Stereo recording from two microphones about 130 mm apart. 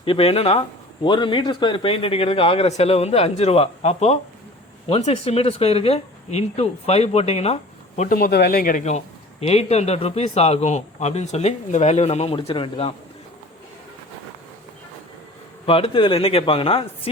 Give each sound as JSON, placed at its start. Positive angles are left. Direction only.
{"t": 0.0, "sound": "speech", "side_deg": 45}
{"t": 1.0, "sound": "speech", "side_deg": 35}
{"t": 15.6, "sound": "speech", "side_deg": 45}